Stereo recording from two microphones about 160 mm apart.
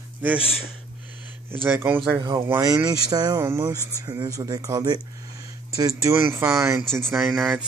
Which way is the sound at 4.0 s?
20° right (ahead or behind).